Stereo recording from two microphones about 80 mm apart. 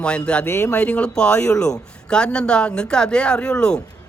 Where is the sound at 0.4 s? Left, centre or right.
Left.